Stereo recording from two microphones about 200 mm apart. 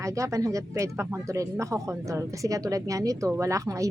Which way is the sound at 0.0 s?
15° right (ahead or behind).